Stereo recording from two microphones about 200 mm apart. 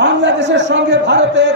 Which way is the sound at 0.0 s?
60° right (ahead or behind).